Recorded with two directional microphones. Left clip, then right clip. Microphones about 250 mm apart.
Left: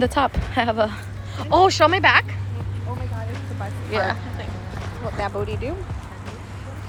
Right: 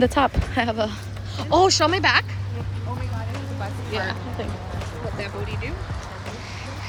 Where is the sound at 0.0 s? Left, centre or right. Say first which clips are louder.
Right 1 dB; centre.